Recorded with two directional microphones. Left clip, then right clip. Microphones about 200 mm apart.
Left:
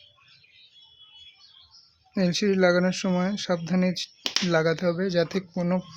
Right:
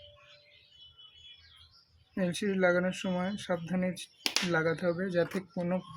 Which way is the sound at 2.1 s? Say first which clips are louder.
Left 8 dB; 45° left (ahead or behind).